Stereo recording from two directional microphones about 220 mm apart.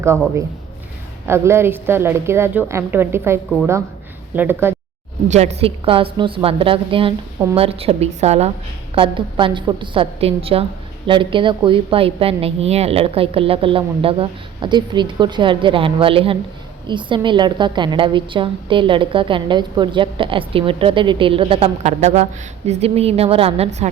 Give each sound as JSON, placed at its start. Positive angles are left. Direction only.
{"t": 1.3, "sound": "a woman's voice", "side_deg": -10}
{"t": 5.3, "sound": "a woman's voice", "side_deg": -30}